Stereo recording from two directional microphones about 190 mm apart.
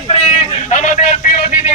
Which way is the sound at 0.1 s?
35° left (ahead or behind).